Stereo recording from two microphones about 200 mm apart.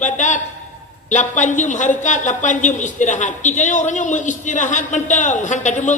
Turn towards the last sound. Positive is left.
turn(degrees=35)  # may be behind; listen again after turning